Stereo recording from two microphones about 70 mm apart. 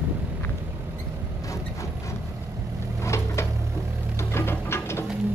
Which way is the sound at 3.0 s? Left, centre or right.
Left.